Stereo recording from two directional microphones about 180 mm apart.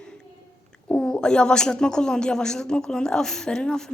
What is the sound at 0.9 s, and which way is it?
Speech, 5° left (ahead or behind).